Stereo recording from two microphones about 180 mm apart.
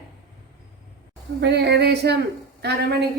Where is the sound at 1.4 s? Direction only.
70° right (ahead or behind).